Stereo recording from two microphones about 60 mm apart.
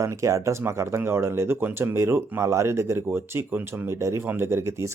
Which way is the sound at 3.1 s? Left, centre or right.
Right.